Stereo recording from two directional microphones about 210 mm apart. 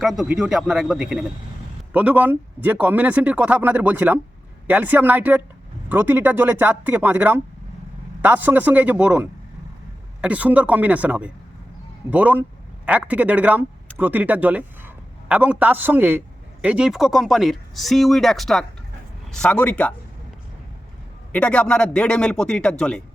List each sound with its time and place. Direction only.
0.0 s a man's voice: centre (ahead or behind)
21.3 s speech: 5° left (ahead or behind)